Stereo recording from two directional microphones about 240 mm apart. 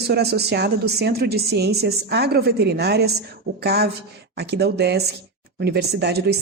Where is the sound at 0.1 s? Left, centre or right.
Right.